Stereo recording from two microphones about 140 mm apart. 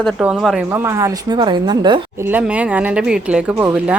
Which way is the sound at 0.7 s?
20° right (ahead or behind).